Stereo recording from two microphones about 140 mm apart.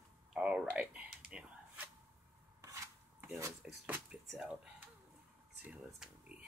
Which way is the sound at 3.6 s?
10° right (ahead or behind).